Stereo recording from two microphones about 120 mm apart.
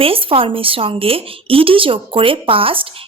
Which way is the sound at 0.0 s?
50° right (ahead or behind).